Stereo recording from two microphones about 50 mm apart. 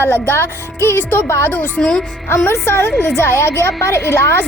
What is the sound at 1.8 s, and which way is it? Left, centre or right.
Speech, centre.